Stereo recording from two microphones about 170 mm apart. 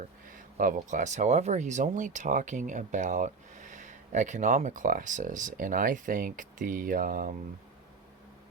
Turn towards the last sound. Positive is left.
turn(degrees=-50)  # may be behind; listen again after turning